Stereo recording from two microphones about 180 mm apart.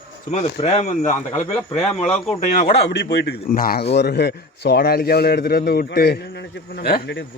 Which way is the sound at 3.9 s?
65° left (ahead or behind).